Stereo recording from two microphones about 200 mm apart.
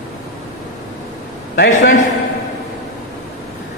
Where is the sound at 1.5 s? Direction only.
60° left (ahead or behind).